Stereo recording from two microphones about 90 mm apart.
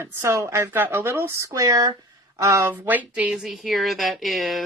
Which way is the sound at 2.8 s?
20° right (ahead or behind).